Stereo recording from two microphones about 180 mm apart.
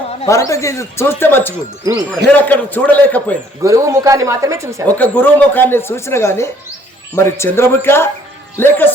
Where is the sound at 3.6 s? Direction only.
20° right (ahead or behind).